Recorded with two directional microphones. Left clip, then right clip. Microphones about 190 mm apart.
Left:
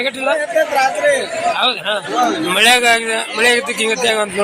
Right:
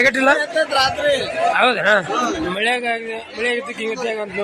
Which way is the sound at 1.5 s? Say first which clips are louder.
Right 6 dB; 50° right (ahead or behind).